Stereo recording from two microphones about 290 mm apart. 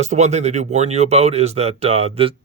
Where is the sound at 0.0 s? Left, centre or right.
Right.